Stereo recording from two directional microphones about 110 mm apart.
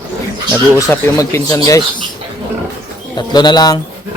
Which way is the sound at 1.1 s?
30° left (ahead or behind).